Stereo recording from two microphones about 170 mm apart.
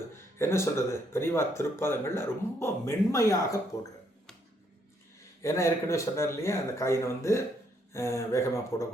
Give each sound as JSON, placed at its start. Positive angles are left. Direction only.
{"t": 0.3, "sound": "speech", "side_deg": 15}
{"t": 5.4, "sound": "speech", "side_deg": 15}